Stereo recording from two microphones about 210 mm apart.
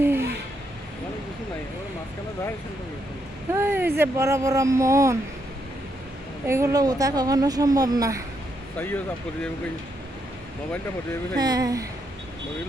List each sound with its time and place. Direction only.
0.0 s a sound: 10° right (ahead or behind)
3.5 s a woman's voice: 10° right (ahead or behind)
6.5 s a woman's voice: 15° right (ahead or behind)
11.3 s a woman's voice: 20° right (ahead or behind)